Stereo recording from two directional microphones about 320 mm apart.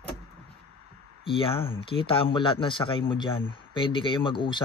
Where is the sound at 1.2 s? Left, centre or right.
Centre.